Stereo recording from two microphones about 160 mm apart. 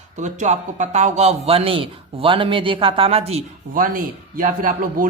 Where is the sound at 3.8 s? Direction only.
60° right (ahead or behind).